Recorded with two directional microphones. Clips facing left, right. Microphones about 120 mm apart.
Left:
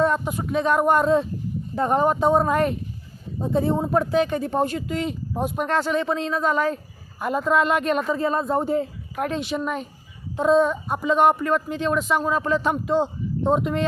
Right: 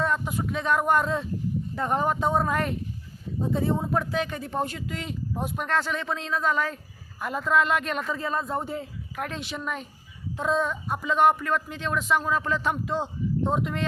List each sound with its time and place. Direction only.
0.0 s speech: 30° left (ahead or behind)
9.2 s speech: 20° left (ahead or behind)